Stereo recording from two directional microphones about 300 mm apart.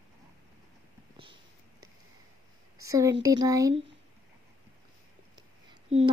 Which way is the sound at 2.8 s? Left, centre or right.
Centre.